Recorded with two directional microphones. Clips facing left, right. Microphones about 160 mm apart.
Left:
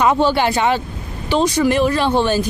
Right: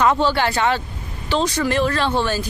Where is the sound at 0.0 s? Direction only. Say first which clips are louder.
Left 2 dB; 15° left (ahead or behind).